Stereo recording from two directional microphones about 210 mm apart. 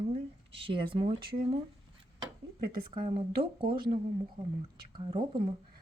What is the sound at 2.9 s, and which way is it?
Speech, 25° right (ahead or behind).